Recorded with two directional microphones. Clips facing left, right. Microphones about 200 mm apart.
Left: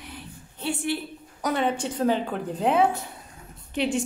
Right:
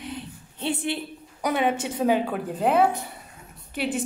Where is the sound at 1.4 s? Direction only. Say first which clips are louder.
Right 1 dB; 10° right (ahead or behind).